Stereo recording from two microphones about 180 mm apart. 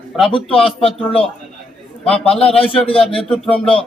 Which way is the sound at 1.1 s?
5° left (ahead or behind).